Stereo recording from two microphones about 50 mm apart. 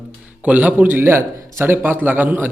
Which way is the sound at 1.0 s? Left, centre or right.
Right.